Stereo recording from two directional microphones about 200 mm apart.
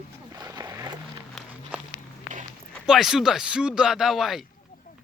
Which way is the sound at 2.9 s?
Centre (ahead or behind).